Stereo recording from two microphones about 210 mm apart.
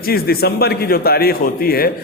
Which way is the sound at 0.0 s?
45° left (ahead or behind).